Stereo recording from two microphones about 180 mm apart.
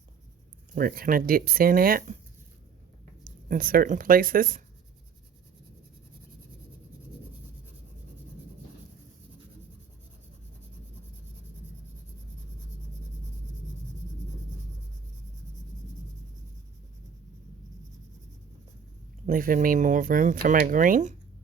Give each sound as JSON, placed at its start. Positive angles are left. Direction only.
{"t": 0.8, "sound": "speech", "side_deg": -55}
{"t": 3.5, "sound": "speech", "side_deg": -50}
{"t": 19.2, "sound": "speech", "side_deg": -50}